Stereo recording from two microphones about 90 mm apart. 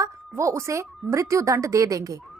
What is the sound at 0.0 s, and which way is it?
A woman's voice, 35° right (ahead or behind).